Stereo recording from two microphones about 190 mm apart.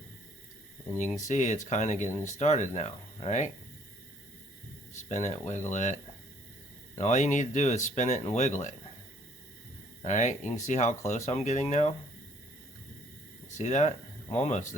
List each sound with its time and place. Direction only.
0.9 s speech: 40° left (ahead or behind)
5.0 s speech: 35° left (ahead or behind)
10.0 s speech: 40° left (ahead or behind)
13.6 s speech: 40° left (ahead or behind)